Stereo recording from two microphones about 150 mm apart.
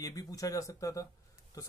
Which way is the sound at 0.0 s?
25° left (ahead or behind).